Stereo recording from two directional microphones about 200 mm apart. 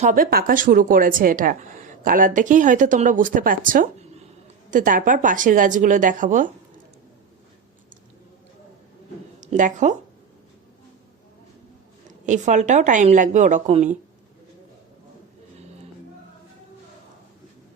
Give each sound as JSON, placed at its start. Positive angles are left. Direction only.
{"t": 0.0, "sound": "a woman's voice", "side_deg": -45}
{"t": 9.4, "sound": "speech", "side_deg": -40}
{"t": 12.2, "sound": "speech", "side_deg": -40}